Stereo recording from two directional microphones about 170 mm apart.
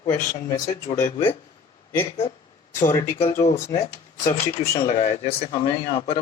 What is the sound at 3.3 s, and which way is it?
Speech, 40° left (ahead or behind).